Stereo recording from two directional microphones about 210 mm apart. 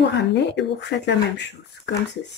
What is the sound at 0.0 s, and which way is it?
Speech, 55° left (ahead or behind).